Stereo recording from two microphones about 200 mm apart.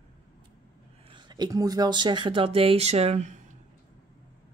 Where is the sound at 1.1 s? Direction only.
20° right (ahead or behind).